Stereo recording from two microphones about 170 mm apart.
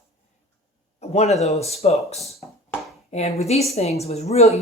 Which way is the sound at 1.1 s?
40° left (ahead or behind).